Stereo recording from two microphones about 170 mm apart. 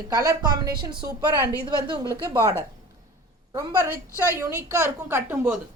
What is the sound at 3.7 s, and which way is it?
A woman's voice, 15° right (ahead or behind).